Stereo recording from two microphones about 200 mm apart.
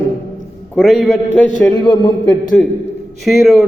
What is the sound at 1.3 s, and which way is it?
A man's voice, 10° left (ahead or behind).